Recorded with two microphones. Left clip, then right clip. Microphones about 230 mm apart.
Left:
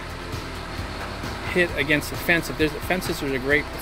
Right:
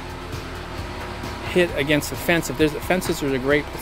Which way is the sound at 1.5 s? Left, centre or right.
Centre.